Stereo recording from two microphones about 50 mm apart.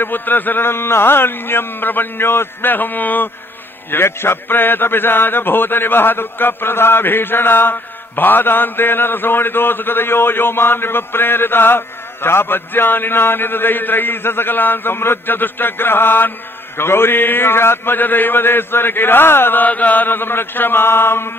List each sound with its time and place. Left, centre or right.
0.0 s a man's voice: left
3.9 s a man's voice: left
19.6 s a man's voice: left